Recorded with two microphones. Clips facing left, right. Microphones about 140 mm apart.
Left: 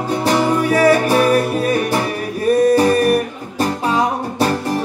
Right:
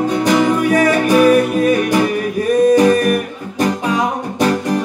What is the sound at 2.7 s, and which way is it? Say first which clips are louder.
Music: right 1 dB; 30° left (ahead or behind).